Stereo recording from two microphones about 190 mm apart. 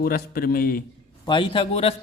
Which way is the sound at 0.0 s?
50° left (ahead or behind).